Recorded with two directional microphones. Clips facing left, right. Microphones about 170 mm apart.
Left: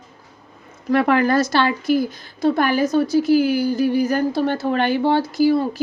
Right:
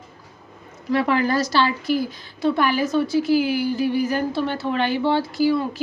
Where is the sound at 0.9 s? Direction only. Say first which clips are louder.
Left 4 dB; 55° left (ahead or behind).